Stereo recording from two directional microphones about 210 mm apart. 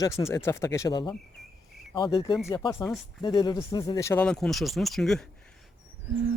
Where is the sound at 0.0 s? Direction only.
15° left (ahead or behind).